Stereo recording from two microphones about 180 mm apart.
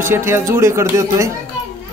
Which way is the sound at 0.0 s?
15° right (ahead or behind).